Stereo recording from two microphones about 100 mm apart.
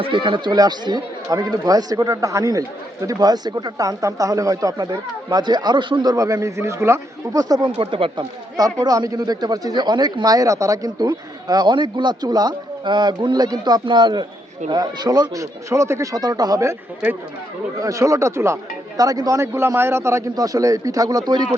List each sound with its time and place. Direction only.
0.0 s speech: 55° right (ahead or behind); by 7.7 s 40° right (ahead or behind)
7.8 s speech: 60° right (ahead or behind)
8.5 s speech: 40° right (ahead or behind)
17.7 s speech: 35° right (ahead or behind)
18.9 s speech: 40° right (ahead or behind)